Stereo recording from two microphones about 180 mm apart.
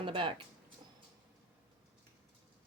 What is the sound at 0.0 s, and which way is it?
Speech, 30° right (ahead or behind).